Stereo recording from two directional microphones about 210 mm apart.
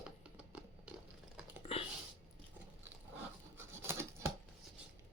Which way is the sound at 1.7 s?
25° left (ahead or behind).